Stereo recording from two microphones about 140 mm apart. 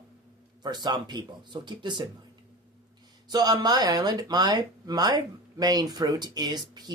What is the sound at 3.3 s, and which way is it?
Speech, 30° right (ahead or behind).